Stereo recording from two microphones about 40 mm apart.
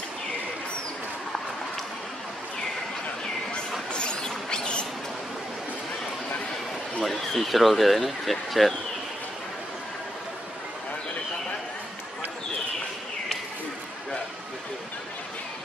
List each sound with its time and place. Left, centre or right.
3.9 s train: left
4.2 s a sound: left
7.1 s speech: centre